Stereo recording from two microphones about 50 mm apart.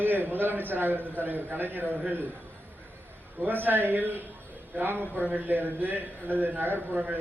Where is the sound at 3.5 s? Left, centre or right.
Right.